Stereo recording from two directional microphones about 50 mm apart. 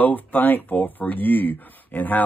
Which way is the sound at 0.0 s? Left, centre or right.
Left.